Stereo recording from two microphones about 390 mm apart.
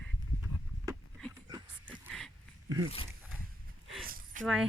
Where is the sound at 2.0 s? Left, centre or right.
Centre.